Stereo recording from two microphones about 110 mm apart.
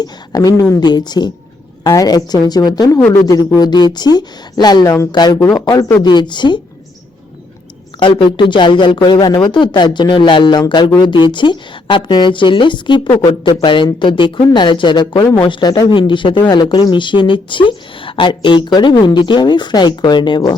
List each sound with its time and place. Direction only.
0.0 s a woman's voice: 35° left (ahead or behind)
8.2 s speech: 45° left (ahead or behind)